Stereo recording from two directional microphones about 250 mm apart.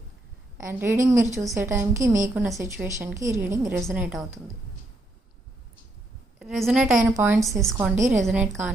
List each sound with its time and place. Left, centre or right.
0.6 s a woman's voice: centre
6.4 s a woman's voice: centre
7.9 s a woman's voice: right
8.2 s a woman's voice: centre